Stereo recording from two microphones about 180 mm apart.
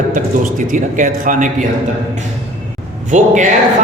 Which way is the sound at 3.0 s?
45° right (ahead or behind).